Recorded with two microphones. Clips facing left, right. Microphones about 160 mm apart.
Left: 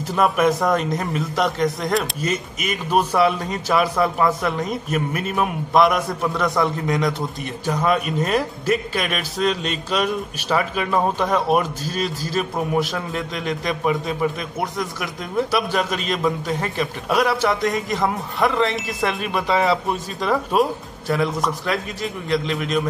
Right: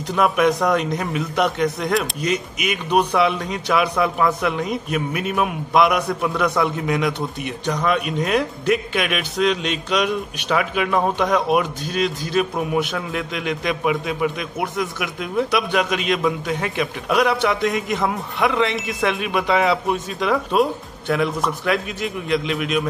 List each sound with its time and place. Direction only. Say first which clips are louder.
0.0 s a man's voice: even; centre (ahead or behind)